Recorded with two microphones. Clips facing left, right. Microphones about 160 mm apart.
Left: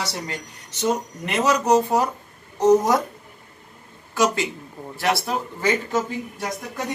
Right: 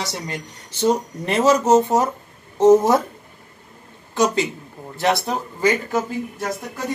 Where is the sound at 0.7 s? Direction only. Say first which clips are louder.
Right 4 dB; 30° right (ahead or behind).